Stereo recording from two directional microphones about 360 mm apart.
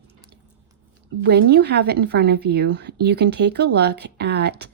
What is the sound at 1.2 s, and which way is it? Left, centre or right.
A woman's voice, right.